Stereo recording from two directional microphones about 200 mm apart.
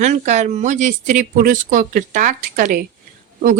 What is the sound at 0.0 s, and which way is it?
Speech, 35° right (ahead or behind).